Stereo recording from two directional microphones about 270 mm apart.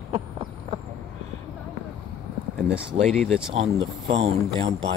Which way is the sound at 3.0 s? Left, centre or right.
Centre.